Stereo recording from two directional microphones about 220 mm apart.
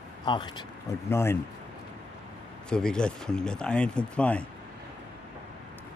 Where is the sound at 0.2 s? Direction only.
20° left (ahead or behind).